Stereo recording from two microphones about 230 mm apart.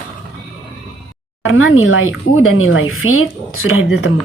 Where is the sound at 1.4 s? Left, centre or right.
Left.